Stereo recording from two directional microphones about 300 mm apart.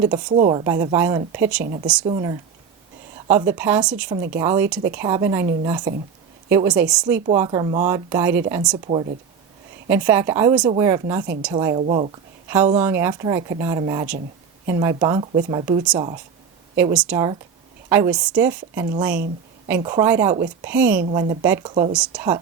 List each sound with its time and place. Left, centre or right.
0.0 s a woman's voice: centre
1.6 s a woman's voice: right
2.0 s a woman's voice: centre
9.9 s a woman's voice: centre
12.8 s speech: centre
16.7 s speech: centre